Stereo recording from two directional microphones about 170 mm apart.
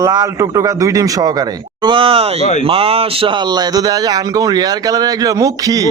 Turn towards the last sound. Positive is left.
turn(degrees=-20)  # may be behind; listen again after turning